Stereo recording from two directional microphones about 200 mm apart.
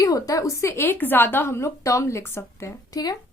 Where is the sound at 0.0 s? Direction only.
15° left (ahead or behind).